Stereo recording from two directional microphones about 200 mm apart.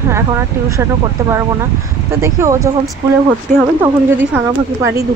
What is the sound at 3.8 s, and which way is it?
Speech, 10° right (ahead or behind).